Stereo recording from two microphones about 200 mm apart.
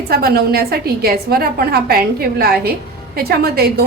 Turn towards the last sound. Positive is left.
turn(degrees=-50)  # may be behind; listen again after turning